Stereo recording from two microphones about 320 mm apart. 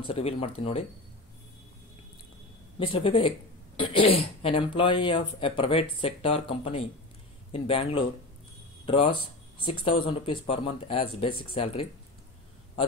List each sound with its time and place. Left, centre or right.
0.0 s speech: centre
2.9 s speech: centre